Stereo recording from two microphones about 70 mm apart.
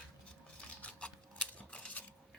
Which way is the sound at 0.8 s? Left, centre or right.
Centre.